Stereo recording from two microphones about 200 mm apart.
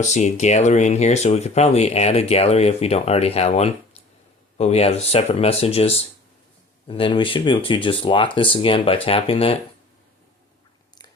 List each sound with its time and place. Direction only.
0.0 s speech: 35° left (ahead or behind)